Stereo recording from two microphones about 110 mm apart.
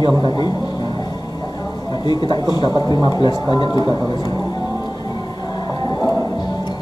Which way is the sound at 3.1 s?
40° left (ahead or behind).